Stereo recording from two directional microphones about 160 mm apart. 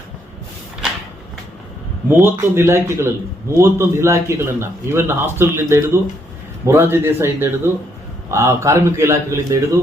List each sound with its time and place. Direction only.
2.0 s a man's voice: 15° right (ahead or behind)